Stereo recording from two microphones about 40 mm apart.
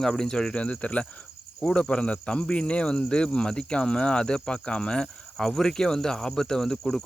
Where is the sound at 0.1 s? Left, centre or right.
Centre.